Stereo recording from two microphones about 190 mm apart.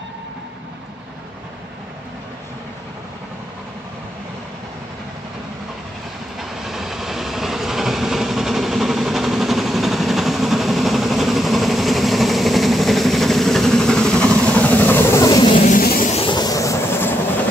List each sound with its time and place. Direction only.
6.6 s train: centre (ahead or behind); by 15.7 s 25° left (ahead or behind)
15.7 s vehicle: 50° left (ahead or behind)
16.1 s vehicle: 30° left (ahead or behind)